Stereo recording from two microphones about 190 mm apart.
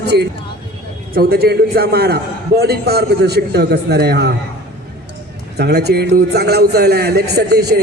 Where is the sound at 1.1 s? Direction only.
55° right (ahead or behind).